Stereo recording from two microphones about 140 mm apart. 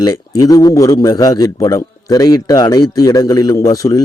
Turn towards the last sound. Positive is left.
turn(degrees=25)  # may be behind; listen again after turning